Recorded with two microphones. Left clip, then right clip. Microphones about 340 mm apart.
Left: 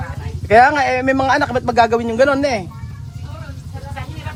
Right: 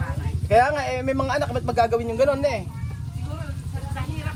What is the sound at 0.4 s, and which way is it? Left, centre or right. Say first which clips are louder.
Speech: left 8 dB; left.